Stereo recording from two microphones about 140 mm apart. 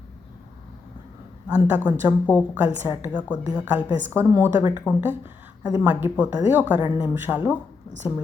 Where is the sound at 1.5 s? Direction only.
10° right (ahead or behind).